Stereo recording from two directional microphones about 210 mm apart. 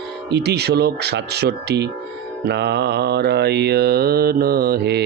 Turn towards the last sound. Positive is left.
turn(degrees=-50)  # may be behind; listen again after turning